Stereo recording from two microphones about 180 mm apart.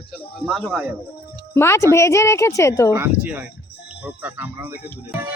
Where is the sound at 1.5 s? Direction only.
15° left (ahead or behind).